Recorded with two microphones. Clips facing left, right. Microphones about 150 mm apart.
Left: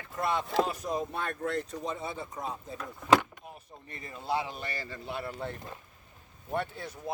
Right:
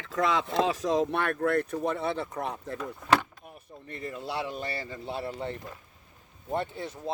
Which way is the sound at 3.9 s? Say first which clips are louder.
Left 1 dB; 70° right (ahead or behind).